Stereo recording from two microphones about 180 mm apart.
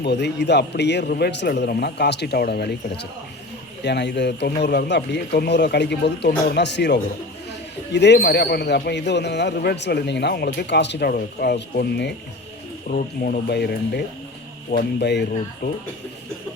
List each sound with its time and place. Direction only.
0.0 s a man's voice: 70° left (ahead or behind)
12.9 s a man's voice: 50° left (ahead or behind); by 15.8 s 65° left (ahead or behind)